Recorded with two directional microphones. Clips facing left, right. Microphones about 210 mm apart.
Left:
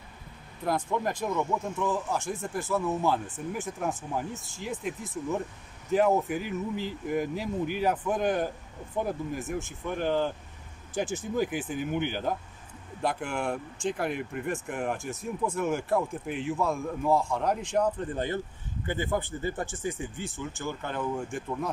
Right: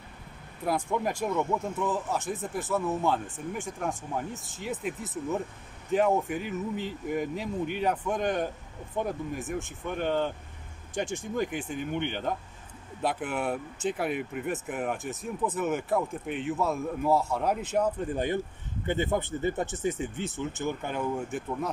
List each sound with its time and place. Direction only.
0.7 s speech: 5° right (ahead or behind)